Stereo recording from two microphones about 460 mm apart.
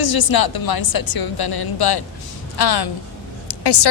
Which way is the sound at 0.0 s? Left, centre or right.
Left.